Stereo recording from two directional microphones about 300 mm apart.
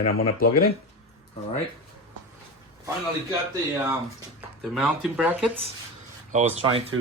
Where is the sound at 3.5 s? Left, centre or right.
Centre.